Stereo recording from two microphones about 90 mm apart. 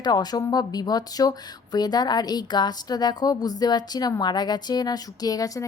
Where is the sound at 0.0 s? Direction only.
50° left (ahead or behind).